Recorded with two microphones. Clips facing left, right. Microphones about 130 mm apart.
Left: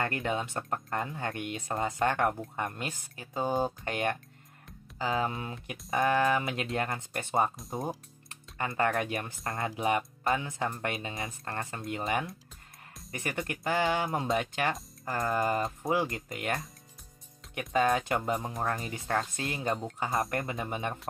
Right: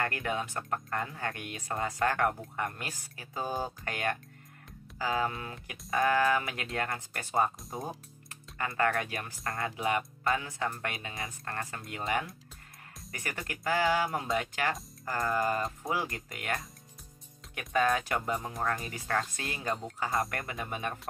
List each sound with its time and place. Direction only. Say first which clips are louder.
0.0 s speech: left 1 dB; 25° left (ahead or behind)
7.5 s speech: left 3 dB; centre (ahead or behind)
8.3 s speech: left 1 dB; 25° left (ahead or behind)
13.1 s speech: left 5 dB; 25° left (ahead or behind)